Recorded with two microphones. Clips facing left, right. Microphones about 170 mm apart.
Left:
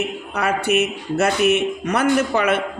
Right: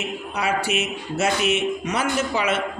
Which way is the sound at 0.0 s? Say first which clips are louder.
Left 3 dB; 60° left (ahead or behind).